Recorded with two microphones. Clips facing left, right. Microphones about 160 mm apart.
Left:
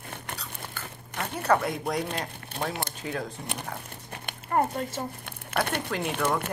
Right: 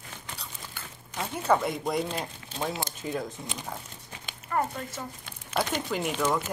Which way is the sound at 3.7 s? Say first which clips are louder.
Left 2 dB; 60° left (ahead or behind).